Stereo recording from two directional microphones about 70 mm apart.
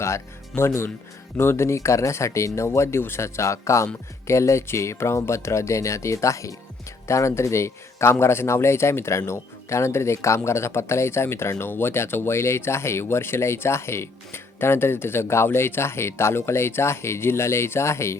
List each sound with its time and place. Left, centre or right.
0.0 s speech: left